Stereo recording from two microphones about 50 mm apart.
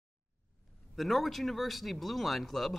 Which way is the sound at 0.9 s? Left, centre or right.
Centre.